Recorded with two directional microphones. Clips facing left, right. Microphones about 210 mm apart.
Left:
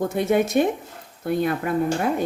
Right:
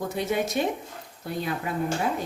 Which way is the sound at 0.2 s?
55° left (ahead or behind).